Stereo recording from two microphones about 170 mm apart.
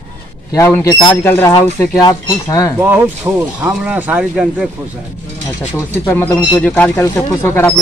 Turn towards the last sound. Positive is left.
turn(degrees=15)  # may be behind; listen again after turning